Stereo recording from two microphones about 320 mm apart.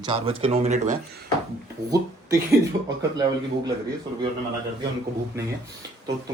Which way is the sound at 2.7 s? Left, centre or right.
Right.